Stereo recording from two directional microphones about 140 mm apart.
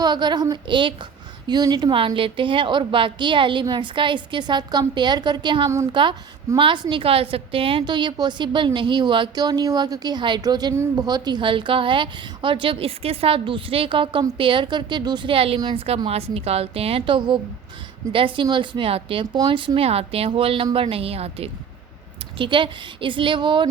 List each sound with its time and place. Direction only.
0.0 s a woman's voice: 30° right (ahead or behind)